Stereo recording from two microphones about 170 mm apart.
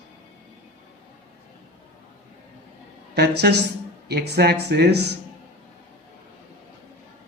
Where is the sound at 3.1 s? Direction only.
75° right (ahead or behind).